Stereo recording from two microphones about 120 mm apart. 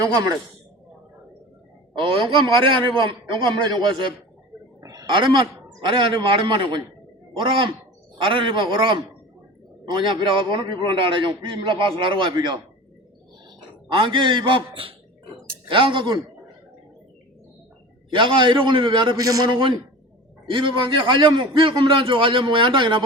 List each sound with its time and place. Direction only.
2.0 s a man's voice: 45° right (ahead or behind)
4.8 s roaring cats: 30° right (ahead or behind)
5.1 s a man's voice: 45° right (ahead or behind)
13.8 s a man's voice: 45° right (ahead or behind)
18.1 s a man's voice: 40° right (ahead or behind)
20.5 s a man's voice: 45° right (ahead or behind)